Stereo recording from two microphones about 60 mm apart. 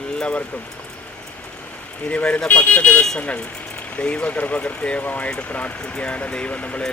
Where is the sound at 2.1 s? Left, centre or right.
Left.